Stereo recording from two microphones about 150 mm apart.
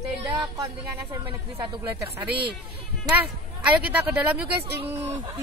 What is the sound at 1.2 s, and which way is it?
Speech, 35° right (ahead or behind).